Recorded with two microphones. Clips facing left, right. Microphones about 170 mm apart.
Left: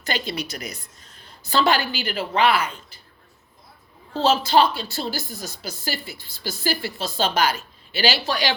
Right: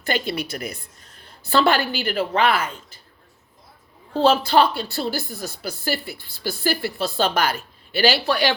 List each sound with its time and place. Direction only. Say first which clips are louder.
0.0 s a woman's voice: right 3 dB; 55° right (ahead or behind)
4.1 s speech: right 2 dB; 55° right (ahead or behind)